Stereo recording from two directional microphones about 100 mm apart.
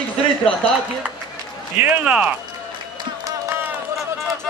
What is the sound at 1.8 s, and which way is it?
Speech, 10° right (ahead or behind).